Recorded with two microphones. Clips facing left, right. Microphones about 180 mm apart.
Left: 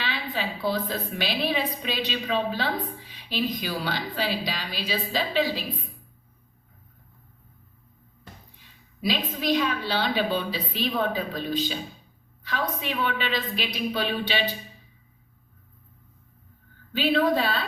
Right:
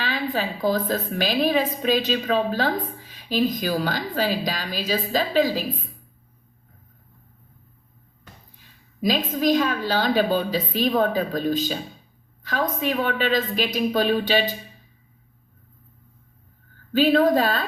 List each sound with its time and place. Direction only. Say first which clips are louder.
0.0 s a woman's voice: right 5 dB; 45° right (ahead or behind)
9.0 s a woman's voice: right 5 dB; 45° right (ahead or behind)
16.9 s a woman's voice: right 5 dB; 45° right (ahead or behind)